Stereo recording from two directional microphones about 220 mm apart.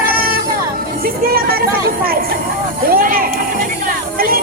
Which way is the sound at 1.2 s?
45° right (ahead or behind).